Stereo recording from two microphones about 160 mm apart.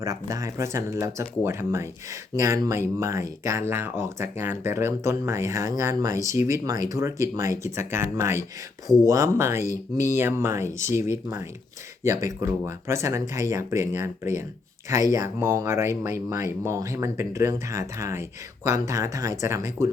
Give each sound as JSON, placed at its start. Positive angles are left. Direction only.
{"t": 0.0, "sound": "speech", "side_deg": -20}